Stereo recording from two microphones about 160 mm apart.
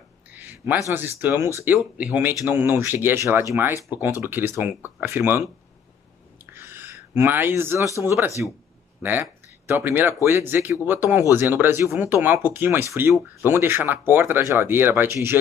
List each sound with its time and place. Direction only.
0.3 s speech: 10° right (ahead or behind)
6.5 s a sound: 15° right (ahead or behind)
8.0 s speech: 15° right (ahead or behind)